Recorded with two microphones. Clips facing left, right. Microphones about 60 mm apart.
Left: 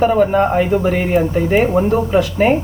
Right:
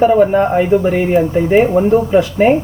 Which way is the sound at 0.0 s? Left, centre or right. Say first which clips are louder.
Right 3 dB; centre.